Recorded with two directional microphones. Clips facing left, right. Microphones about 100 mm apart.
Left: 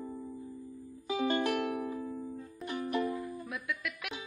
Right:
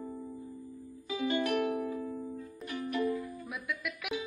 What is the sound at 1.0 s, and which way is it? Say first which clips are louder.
Music: left 1 dB; 35° left (ahead or behind).